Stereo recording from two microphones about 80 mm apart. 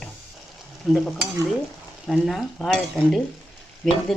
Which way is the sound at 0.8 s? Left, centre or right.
Centre.